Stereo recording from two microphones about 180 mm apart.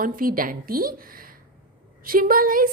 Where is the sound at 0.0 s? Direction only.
50° right (ahead or behind).